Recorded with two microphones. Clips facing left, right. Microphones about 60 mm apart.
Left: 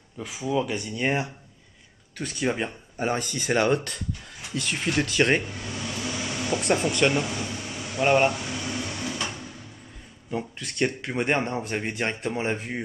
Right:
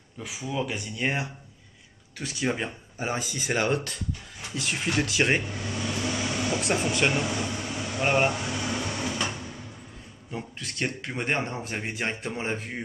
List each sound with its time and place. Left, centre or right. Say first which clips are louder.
0.2 s speech: left 4 dB; centre
8.7 s a sound: right 1 dB; right
10.3 s speech: left 5 dB; centre